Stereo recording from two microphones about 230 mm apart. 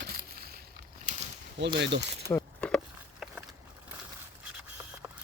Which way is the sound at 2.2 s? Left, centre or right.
Centre.